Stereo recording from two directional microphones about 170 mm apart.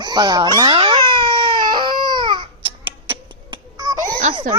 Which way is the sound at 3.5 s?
25° right (ahead or behind).